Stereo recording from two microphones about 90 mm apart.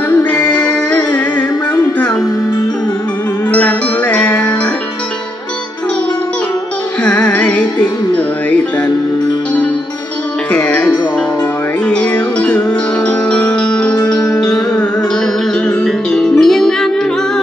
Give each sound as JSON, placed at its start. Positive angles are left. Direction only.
{"t": 0.2, "sound": "music", "side_deg": 15}
{"t": 3.5, "sound": "music", "side_deg": 15}
{"t": 7.1, "sound": "music", "side_deg": 15}
{"t": 10.5, "sound": "music", "side_deg": 15}